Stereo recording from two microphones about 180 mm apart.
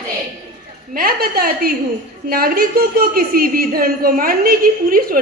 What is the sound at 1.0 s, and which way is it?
A woman's voice, 55° right (ahead or behind).